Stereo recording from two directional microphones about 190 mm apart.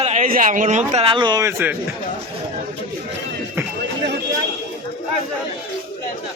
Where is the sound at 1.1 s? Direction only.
20° right (ahead or behind).